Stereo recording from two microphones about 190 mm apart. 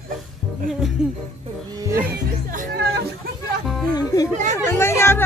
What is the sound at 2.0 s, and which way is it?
Music, 45° right (ahead or behind).